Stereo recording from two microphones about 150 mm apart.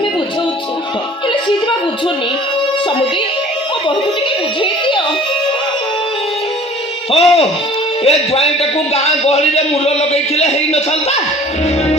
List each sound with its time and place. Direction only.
4.6 s music: 35° left (ahead or behind)
7.1 s a man's voice: 40° left (ahead or behind)